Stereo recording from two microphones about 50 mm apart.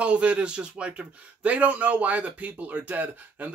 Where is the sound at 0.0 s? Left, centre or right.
Right.